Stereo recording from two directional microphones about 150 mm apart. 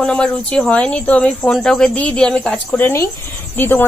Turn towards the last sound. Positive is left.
turn(degrees=15)  # may be behind; listen again after turning